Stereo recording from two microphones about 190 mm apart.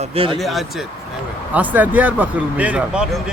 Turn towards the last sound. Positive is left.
turn(degrees=-5)  # may be behind; listen again after turning